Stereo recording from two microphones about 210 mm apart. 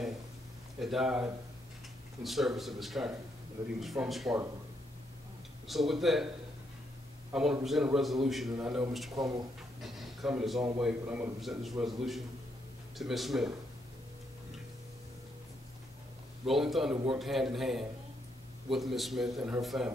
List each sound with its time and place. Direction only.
0.7 s a man's voice: centre (ahead or behind)
5.7 s a man's voice: centre (ahead or behind)
7.3 s a man's voice: centre (ahead or behind)
9.1 s speech: 15° right (ahead or behind)
9.8 s a man's voice: centre (ahead or behind)
16.4 s a man's voice: centre (ahead or behind)
16.9 s a man's voice: 25° right (ahead or behind)
17.2 s a man's voice: centre (ahead or behind)